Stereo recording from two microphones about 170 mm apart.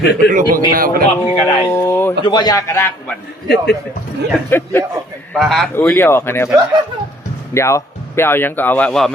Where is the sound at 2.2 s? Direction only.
25° left (ahead or behind).